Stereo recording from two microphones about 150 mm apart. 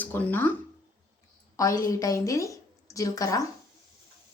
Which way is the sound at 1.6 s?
20° left (ahead or behind).